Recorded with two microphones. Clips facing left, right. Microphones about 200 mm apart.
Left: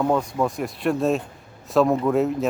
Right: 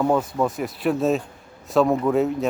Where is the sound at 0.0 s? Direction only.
5° right (ahead or behind).